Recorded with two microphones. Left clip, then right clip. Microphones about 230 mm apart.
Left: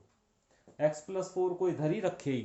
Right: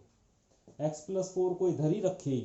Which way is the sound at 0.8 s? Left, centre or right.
Left.